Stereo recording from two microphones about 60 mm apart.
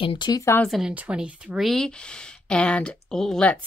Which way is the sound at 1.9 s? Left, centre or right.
Centre.